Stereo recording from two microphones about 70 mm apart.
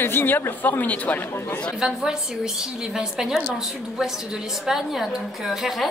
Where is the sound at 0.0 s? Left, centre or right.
Left.